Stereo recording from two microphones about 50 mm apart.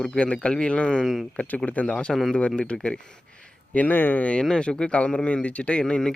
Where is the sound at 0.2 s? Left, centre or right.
Left.